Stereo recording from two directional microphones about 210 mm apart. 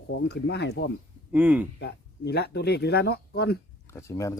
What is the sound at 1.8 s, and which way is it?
Speech, 50° left (ahead or behind).